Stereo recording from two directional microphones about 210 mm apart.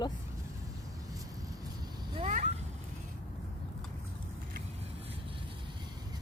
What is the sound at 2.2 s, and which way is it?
Cat, 35° right (ahead or behind).